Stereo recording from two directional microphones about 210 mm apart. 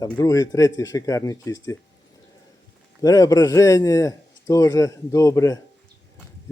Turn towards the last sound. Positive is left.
turn(degrees=15)  # may be behind; listen again after turning